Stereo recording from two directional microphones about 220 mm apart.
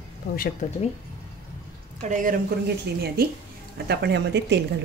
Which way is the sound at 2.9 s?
50° right (ahead or behind).